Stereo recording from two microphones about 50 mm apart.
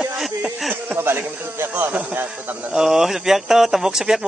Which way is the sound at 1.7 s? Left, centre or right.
Right.